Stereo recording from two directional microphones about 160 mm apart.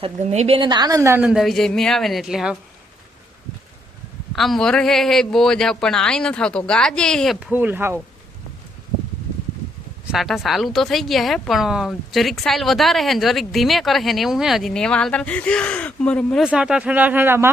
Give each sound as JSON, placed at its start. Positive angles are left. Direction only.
{"t": 0.0, "sound": "a woman's voice", "side_deg": -45}
{"t": 1.3, "sound": "a woman's voice", "side_deg": 0}
{"t": 4.3, "sound": "a woman's voice", "side_deg": 0}
{"t": 7.3, "sound": "speech", "side_deg": -10}
{"t": 10.1, "sound": "a woman's voice", "side_deg": 0}
{"t": 16.5, "sound": "speech", "side_deg": -5}